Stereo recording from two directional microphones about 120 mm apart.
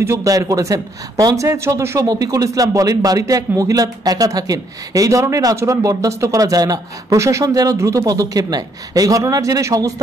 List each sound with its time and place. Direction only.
0.0 s a man's voice: 25° right (ahead or behind)